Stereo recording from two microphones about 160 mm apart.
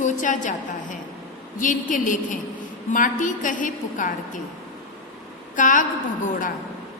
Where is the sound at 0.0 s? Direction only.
50° left (ahead or behind).